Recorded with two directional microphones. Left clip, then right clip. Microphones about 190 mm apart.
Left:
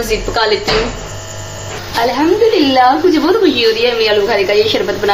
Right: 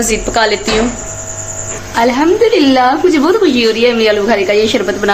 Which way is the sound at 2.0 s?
45° right (ahead or behind).